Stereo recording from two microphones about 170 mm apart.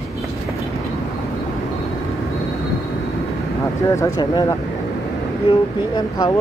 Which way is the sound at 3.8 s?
20° left (ahead or behind).